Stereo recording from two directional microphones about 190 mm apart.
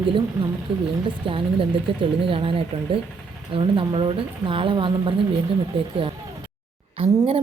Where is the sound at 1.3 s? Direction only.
25° right (ahead or behind).